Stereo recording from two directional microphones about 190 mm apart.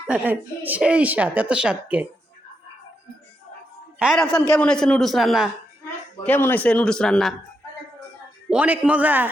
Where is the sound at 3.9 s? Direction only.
5° right (ahead or behind).